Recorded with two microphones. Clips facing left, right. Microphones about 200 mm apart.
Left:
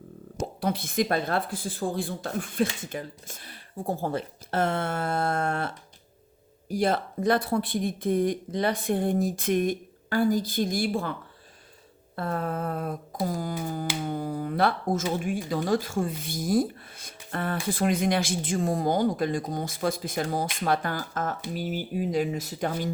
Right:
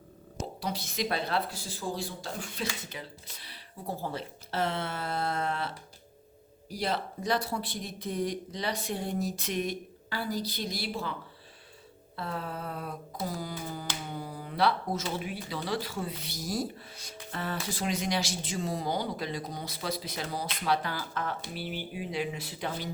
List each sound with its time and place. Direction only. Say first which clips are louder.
0.3 s speech: left 6 dB; 55° left (ahead or behind)
12.1 s speech: left 7 dB; 50° left (ahead or behind)